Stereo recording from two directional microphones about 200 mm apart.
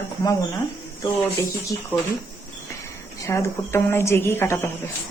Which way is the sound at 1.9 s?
10° left (ahead or behind).